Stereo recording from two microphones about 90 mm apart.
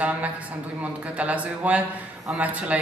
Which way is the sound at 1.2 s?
15° right (ahead or behind).